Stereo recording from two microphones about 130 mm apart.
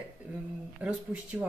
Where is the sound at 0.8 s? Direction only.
10° right (ahead or behind).